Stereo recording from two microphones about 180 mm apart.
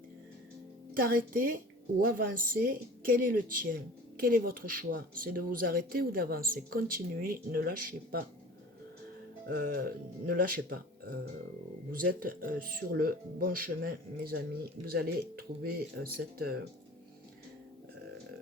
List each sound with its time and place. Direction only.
0.9 s speech: 50° right (ahead or behind)
9.5 s speech: 55° right (ahead or behind)
11.9 s speech: 50° right (ahead or behind)